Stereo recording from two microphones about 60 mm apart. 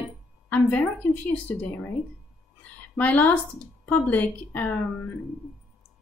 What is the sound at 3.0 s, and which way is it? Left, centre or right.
Speech, left.